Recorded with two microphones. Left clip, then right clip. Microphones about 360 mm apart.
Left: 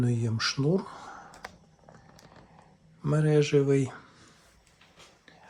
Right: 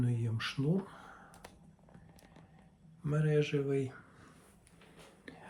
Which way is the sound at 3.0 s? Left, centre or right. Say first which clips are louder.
Left 7 dB; centre.